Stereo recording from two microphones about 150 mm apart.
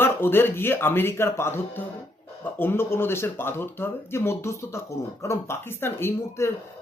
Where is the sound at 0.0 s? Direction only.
15° left (ahead or behind).